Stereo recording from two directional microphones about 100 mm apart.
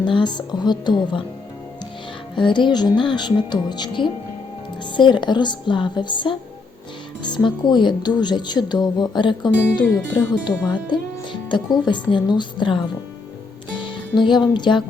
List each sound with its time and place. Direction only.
0.0 s speech: 50° left (ahead or behind)
2.3 s speech: 55° left (ahead or behind)
10.8 s music: 50° left (ahead or behind)
11.9 s speech: 50° left (ahead or behind)
13.8 s music: 50° left (ahead or behind)
14.5 s speech: 50° left (ahead or behind)